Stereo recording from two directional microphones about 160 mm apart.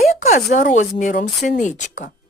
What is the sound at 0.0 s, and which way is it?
Speech, 45° left (ahead or behind).